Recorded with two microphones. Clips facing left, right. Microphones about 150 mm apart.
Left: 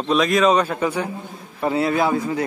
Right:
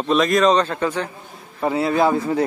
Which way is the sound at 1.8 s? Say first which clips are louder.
Right 1 dB; 20° right (ahead or behind).